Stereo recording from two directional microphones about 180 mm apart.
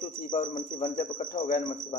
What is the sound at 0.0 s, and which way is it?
A man's voice, 40° left (ahead or behind).